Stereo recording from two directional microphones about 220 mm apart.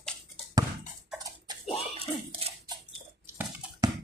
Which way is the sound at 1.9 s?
25° right (ahead or behind).